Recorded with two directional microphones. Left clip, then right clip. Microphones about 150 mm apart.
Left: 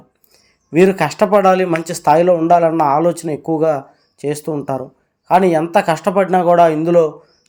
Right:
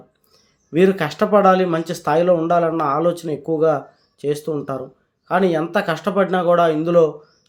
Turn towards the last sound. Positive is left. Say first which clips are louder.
# left 4 dB
turn(degrees=15)  # may be behind; listen again after turning